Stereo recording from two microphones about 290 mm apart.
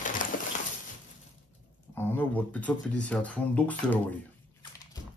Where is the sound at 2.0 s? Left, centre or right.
Centre.